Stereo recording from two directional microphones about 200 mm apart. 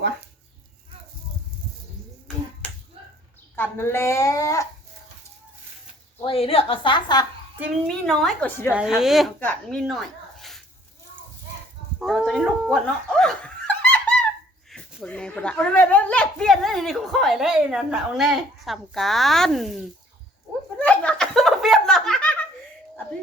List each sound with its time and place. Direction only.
2.6 s finger snapping: 5° left (ahead or behind)
3.5 s speech: 10° left (ahead or behind)
6.2 s a woman's voice: 30° left (ahead or behind)
7.9 s speech: centre (ahead or behind)
8.7 s speech: 5° right (ahead or behind)
11.9 s a sound: centre (ahead or behind)
14.7 s speech: 5° left (ahead or behind)
20.7 s a sound: 5° left (ahead or behind)